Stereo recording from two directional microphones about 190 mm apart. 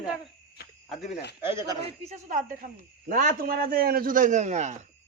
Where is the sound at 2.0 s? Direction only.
40° right (ahead or behind).